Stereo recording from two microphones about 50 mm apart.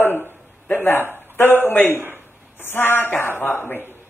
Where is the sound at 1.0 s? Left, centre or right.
Right.